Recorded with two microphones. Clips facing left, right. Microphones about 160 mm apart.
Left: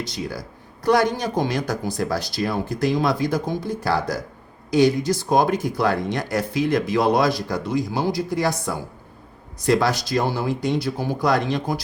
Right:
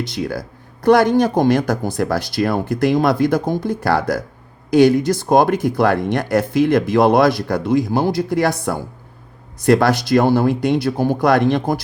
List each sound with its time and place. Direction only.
0.1 s speech: 60° right (ahead or behind)